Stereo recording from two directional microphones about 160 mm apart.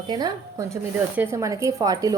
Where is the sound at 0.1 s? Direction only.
25° right (ahead or behind).